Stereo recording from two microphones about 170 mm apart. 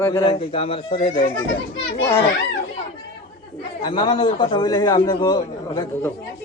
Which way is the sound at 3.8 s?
25° left (ahead or behind).